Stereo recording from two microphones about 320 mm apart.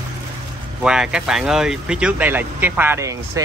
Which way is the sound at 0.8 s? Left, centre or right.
Centre.